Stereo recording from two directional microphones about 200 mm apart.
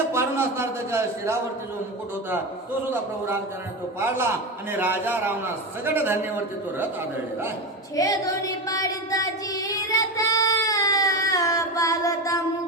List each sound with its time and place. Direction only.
0.1 s a man's voice: 15° right (ahead or behind)
4.8 s a man's voice: 10° right (ahead or behind)
7.9 s child singing: 15° left (ahead or behind)